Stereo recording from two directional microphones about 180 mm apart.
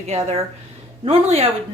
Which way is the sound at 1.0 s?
35° right (ahead or behind).